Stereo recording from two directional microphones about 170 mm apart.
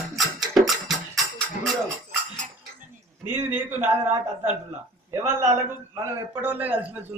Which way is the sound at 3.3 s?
10° right (ahead or behind).